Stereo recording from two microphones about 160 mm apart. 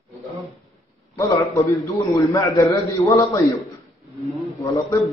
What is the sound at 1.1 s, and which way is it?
A man's voice, 20° left (ahead or behind).